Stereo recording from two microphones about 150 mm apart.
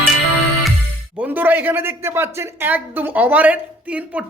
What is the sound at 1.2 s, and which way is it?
A man's voice, 10° right (ahead or behind).